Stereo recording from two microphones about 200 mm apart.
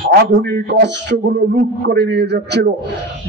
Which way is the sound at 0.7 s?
55° right (ahead or behind).